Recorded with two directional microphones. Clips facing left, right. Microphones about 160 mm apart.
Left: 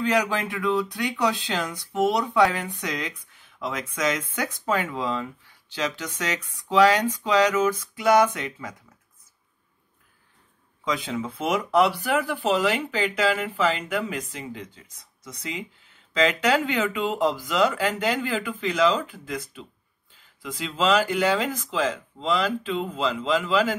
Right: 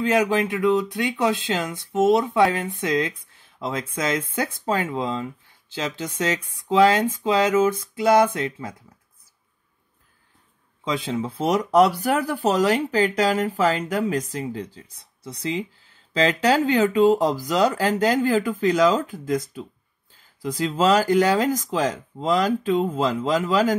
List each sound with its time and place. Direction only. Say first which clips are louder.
0.1 s speech: right 4 dB; 20° right (ahead or behind)
10.8 s speech: right 2 dB; 25° right (ahead or behind); by 23.7 s 40° right (ahead or behind)